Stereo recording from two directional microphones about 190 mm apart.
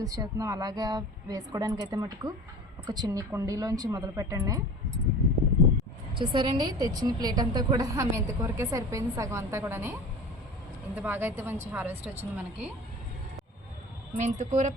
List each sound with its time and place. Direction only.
0.0 s a woman's voice: 20° right (ahead or behind)
6.1 s a woman's voice: 25° right (ahead or behind)
10.9 s a woman's voice: 10° right (ahead or behind)
14.1 s a woman's voice: 40° right (ahead or behind)